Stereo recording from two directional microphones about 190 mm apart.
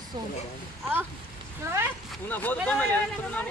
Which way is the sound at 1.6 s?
15° right (ahead or behind).